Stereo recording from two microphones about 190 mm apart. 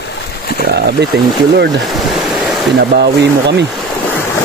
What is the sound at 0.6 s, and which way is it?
Speech, 60° right (ahead or behind).